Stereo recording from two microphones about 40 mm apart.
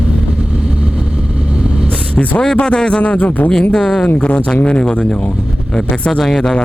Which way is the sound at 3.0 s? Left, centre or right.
Left.